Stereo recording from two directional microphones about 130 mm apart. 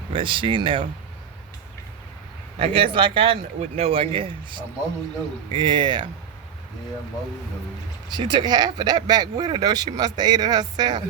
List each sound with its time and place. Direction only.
0.1 s speech: 40° right (ahead or behind)
2.6 s speech: 45° right (ahead or behind)
8.1 s speech: 35° right (ahead or behind)